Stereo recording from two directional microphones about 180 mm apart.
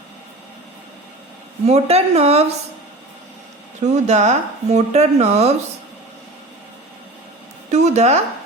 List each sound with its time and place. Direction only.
1.6 s speech: 35° right (ahead or behind)
3.9 s speech: 40° right (ahead or behind)
7.7 s speech: 40° right (ahead or behind)